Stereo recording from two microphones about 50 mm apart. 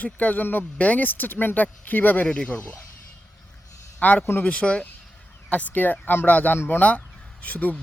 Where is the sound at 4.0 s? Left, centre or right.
Left.